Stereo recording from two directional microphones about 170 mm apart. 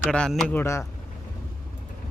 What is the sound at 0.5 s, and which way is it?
Speech, 15° left (ahead or behind).